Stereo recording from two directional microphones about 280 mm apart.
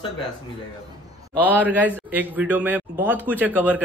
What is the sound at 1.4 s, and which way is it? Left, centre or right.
A man's voice, centre.